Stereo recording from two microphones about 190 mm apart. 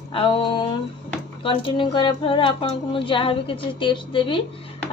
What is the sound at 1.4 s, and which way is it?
Speech, 25° left (ahead or behind).